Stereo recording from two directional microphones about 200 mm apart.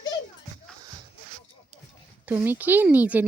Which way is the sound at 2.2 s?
10° right (ahead or behind).